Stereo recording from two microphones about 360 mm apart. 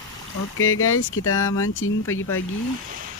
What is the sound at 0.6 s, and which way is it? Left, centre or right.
Speech, left.